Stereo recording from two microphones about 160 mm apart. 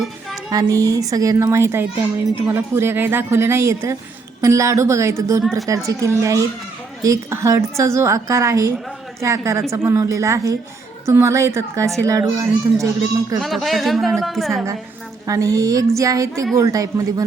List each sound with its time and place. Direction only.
0.5 s a woman's voice: 20° right (ahead or behind)
5.4 s speech: centre (ahead or behind)
5.6 s a woman's voice: 20° right (ahead or behind)
13.4 s speech: centre (ahead or behind)
15.3 s a woman's voice: 20° right (ahead or behind)